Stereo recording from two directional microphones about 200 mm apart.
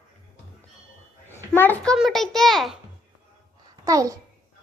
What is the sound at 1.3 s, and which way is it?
A child's voice, 10° left (ahead or behind).